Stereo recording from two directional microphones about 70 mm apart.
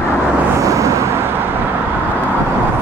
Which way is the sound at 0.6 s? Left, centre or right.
Right.